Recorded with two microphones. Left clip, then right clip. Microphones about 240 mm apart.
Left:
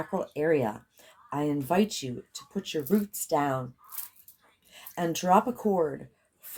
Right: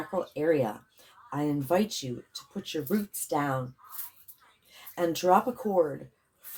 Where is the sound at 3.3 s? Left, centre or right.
Left.